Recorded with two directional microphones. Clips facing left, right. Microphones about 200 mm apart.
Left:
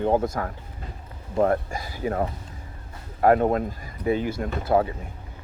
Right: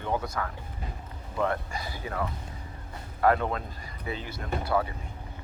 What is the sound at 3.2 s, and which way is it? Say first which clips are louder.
Speech: left 6 dB; 45° left (ahead or behind).